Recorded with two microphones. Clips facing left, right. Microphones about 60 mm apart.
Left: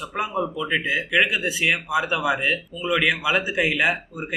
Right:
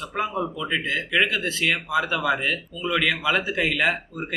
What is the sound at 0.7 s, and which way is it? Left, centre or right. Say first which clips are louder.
Speech: left 2 dB; centre.